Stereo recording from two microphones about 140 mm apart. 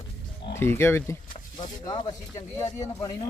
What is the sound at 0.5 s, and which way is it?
Speech, 15° left (ahead or behind).